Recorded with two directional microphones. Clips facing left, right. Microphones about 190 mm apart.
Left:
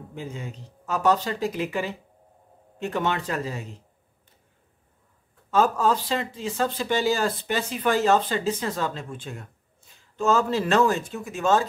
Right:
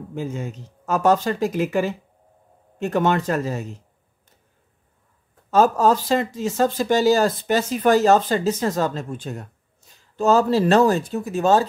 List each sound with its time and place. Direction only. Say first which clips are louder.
0.1 s speech: right 7 dB; 45° right (ahead or behind)
5.5 s speech: right 5 dB; 40° right (ahead or behind)